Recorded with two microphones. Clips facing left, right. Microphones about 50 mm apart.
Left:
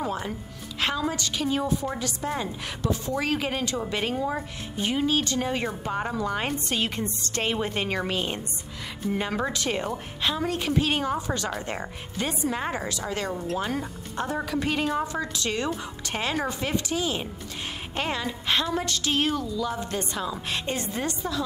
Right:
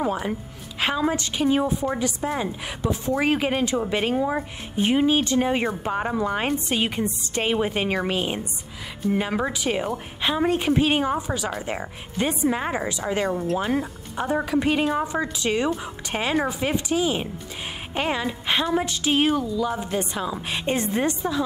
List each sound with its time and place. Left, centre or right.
0.0 s a woman's voice: centre
10.3 s a woman's voice: right
13.3 s speech: centre
13.6 s a woman's voice: centre